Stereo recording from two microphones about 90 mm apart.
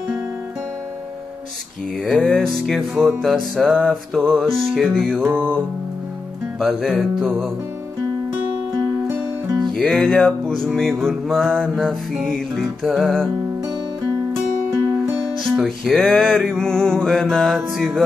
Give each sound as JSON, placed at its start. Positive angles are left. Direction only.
{"t": 2.0, "sound": "music", "side_deg": 5}
{"t": 5.2, "sound": "music", "side_deg": -20}
{"t": 6.6, "sound": "music", "side_deg": 0}
{"t": 9.7, "sound": "music", "side_deg": 5}
{"t": 15.4, "sound": "music", "side_deg": 0}